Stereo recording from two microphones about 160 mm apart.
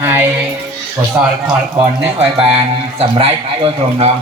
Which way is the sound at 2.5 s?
35° right (ahead or behind).